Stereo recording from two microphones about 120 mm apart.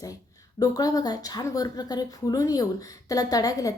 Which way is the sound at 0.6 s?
30° left (ahead or behind).